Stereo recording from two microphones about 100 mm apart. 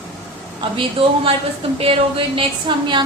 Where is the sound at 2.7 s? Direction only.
50° right (ahead or behind).